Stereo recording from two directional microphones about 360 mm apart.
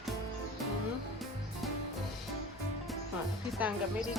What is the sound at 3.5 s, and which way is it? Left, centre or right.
Speech, centre.